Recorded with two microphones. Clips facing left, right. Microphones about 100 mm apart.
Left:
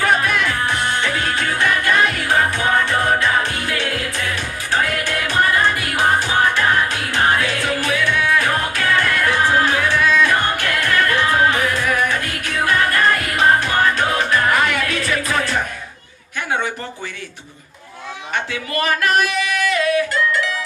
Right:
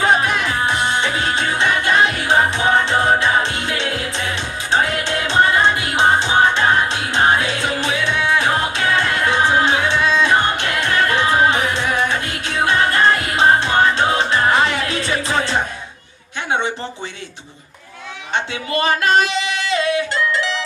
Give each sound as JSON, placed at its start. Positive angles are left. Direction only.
{"t": 0.0, "sound": "music", "side_deg": -20}
{"t": 16.5, "sound": "a sound", "side_deg": -25}
{"t": 18.3, "sound": "singing", "side_deg": -25}